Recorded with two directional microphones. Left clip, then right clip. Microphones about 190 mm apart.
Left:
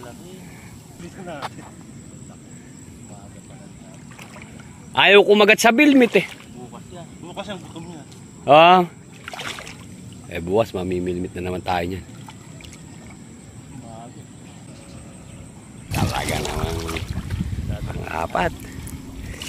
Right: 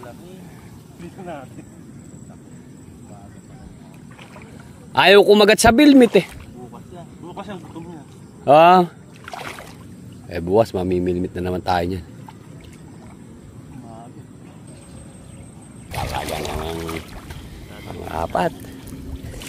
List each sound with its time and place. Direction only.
4.9 s speech: 25° right (ahead or behind)
7.2 s speech: centre (ahead or behind)
8.5 s speech: 25° right (ahead or behind)
9.2 s boat: 15° right (ahead or behind)
10.3 s speech: 25° right (ahead or behind)
15.9 s pour: 5° right (ahead or behind)
17.8 s a sound: 10° right (ahead or behind)